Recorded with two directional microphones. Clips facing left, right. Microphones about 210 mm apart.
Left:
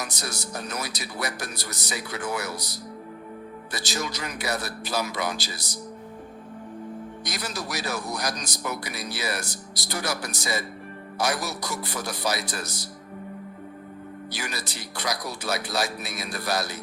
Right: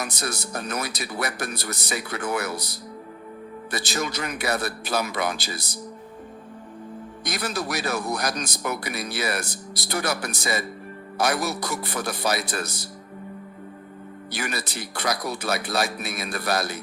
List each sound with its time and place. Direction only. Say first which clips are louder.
0.0 s a man's voice: right 3 dB; 55° right (ahead or behind)
7.3 s a man's voice: right 6 dB; 55° right (ahead or behind)
14.3 s a man's voice: right 6 dB; 55° right (ahead or behind)